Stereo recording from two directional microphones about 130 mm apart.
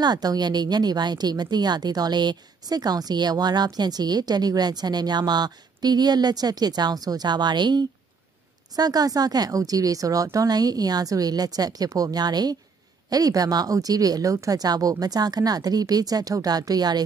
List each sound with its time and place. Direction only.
0.0 s speech: 30° right (ahead or behind)